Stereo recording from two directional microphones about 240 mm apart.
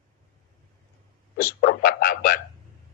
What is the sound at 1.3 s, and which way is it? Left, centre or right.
A man's voice, left.